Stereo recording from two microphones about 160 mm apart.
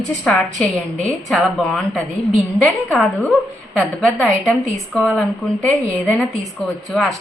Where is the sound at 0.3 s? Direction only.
5° left (ahead or behind).